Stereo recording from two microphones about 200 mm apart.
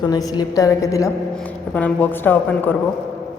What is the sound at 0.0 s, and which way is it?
Speech, 20° left (ahead or behind).